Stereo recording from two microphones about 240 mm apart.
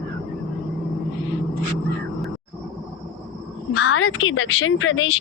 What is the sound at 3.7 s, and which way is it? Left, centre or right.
Speech, left.